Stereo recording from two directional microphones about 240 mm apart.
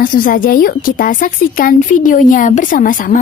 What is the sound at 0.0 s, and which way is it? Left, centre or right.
A woman's voice, left.